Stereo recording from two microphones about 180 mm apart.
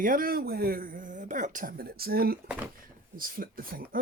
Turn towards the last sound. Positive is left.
turn(degrees=-55)  # may be behind; listen again after turning